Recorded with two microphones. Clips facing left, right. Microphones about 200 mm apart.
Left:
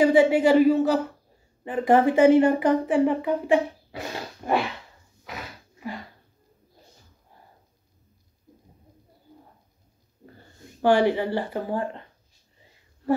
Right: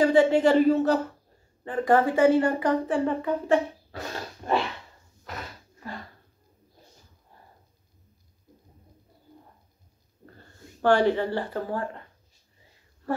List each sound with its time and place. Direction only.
0.0 s speech: 10° left (ahead or behind)
1.6 s speech: 15° left (ahead or behind)
5.2 s a sound: 10° left (ahead or behind)
10.8 s speech: 10° left (ahead or behind)